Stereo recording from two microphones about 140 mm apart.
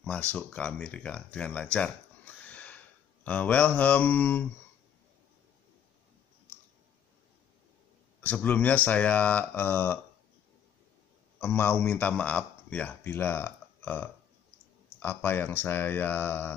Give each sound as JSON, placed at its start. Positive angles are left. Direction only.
{"t": 0.0, "sound": "speech", "side_deg": 10}
{"t": 8.2, "sound": "speech", "side_deg": 10}
{"t": 11.3, "sound": "a man's voice", "side_deg": 15}